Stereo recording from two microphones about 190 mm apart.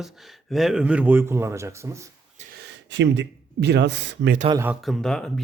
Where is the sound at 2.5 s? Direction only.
65° right (ahead or behind).